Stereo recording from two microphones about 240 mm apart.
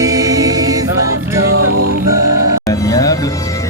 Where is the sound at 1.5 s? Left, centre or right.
Right.